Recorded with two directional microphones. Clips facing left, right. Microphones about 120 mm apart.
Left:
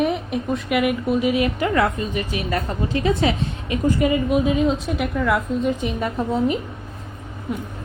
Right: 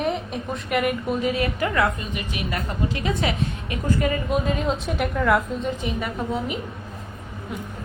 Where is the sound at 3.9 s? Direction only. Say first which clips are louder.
Left 4 dB; 15° left (ahead or behind).